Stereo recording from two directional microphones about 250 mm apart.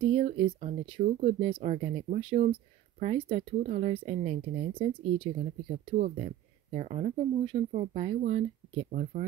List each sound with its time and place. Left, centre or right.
0.0 s speech: right